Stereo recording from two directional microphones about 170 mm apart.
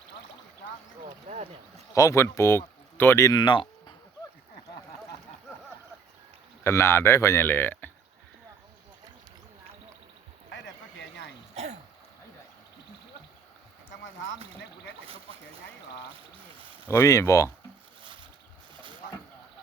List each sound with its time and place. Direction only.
1.3 s speech: 40° right (ahead or behind)
1.9 s speech: 20° left (ahead or behind)
6.7 s speech: 15° left (ahead or behind)
11.5 s a sound: 40° right (ahead or behind)
16.8 s speech: 15° left (ahead or behind)